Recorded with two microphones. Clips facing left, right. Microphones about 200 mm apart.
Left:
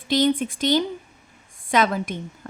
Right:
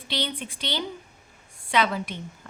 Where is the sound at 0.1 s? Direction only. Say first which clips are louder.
Left 12 dB; 45° left (ahead or behind).